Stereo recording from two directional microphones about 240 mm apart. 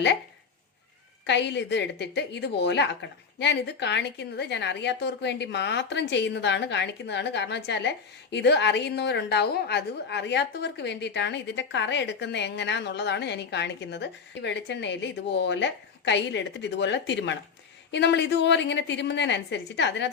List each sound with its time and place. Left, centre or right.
1.3 s a woman's voice: left